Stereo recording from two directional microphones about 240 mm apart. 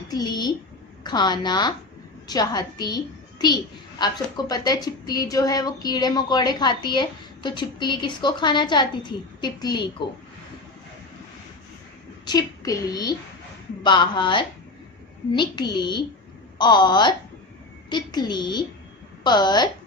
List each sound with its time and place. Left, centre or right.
0.1 s a sound: centre
1.0 s a woman's voice: centre
12.2 s a woman's voice: centre